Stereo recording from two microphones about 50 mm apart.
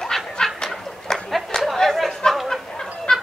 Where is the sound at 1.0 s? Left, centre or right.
Centre.